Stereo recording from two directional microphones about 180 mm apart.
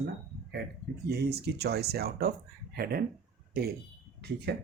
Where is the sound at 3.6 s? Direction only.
60° right (ahead or behind).